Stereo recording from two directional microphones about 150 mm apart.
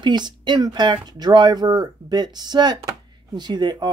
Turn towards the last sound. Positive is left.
turn(degrees=-30)  # may be behind; listen again after turning